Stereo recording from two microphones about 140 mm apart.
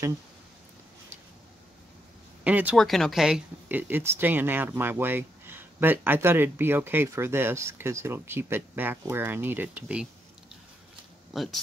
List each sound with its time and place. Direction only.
2.4 s speech: 10° right (ahead or behind)
2.8 s speech: centre (ahead or behind)
11.3 s speech: centre (ahead or behind)